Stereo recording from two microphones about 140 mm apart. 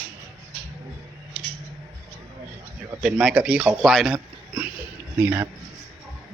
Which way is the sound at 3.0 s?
5° right (ahead or behind).